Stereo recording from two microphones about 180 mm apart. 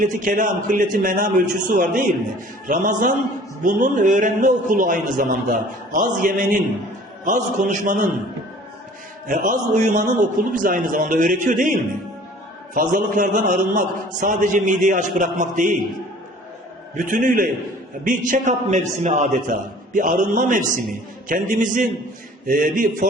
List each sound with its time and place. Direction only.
0.0 s a man's voice: 45° right (ahead or behind)
9.2 s a man's voice: 45° right (ahead or behind)
17.1 s a man's voice: 50° right (ahead or behind)